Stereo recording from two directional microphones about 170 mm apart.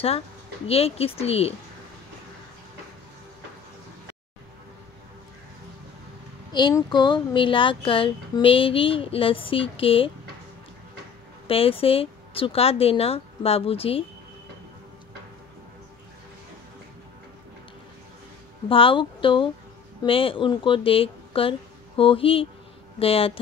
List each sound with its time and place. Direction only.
0.7 s speech: 35° left (ahead or behind)
6.5 s speech: 25° left (ahead or behind)
11.4 s speech: 35° left (ahead or behind)
18.7 s speech: 30° left (ahead or behind)